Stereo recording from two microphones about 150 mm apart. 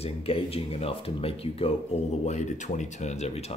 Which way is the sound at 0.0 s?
40° left (ahead or behind).